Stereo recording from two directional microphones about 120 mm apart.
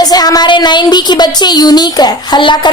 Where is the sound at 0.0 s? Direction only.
35° left (ahead or behind).